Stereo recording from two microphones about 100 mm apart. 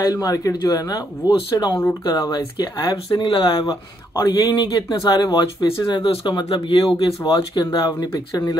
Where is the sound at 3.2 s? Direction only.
60° left (ahead or behind).